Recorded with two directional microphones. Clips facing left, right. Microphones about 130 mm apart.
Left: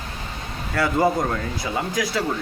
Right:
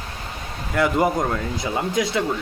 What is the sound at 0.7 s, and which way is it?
Speech, 20° right (ahead or behind).